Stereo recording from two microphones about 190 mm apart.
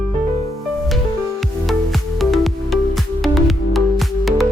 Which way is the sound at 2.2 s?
Centre (ahead or behind).